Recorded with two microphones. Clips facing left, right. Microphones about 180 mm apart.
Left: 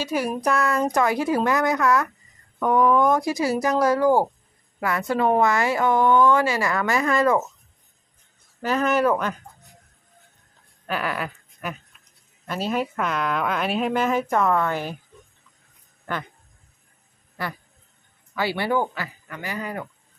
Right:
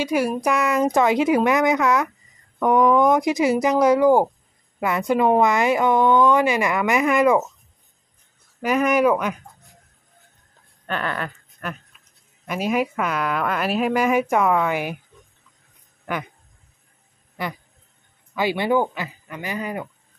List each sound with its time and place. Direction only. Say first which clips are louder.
0.0 s speech: right 3 dB; 10° right (ahead or behind)
8.6 s speech: right 3 dB; 15° right (ahead or behind)
10.9 s speech: even; 5° left (ahead or behind)
12.4 s speech: right 3 dB; 10° right (ahead or behind)
16.1 s a sound: right 2 dB; 15° right (ahead or behind)
18.3 s speech: right 3 dB; 15° right (ahead or behind)